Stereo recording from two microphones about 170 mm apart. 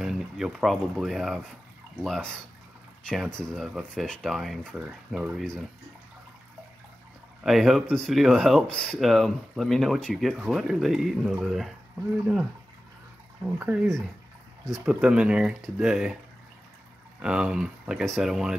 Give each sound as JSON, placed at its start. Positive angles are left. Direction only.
{"t": 0.0, "sound": "speech", "side_deg": 0}
{"t": 7.4, "sound": "speech", "side_deg": 0}
{"t": 13.6, "sound": "speech", "side_deg": -10}
{"t": 14.9, "sound": "speech", "side_deg": -5}
{"t": 17.2, "sound": "speech", "side_deg": -5}